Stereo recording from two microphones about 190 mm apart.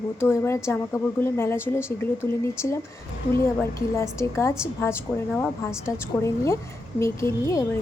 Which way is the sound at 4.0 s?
15° left (ahead or behind).